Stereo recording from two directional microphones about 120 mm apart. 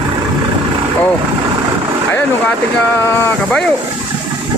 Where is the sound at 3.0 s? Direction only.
15° left (ahead or behind).